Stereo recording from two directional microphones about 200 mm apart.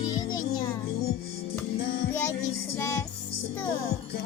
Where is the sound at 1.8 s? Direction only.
55° left (ahead or behind).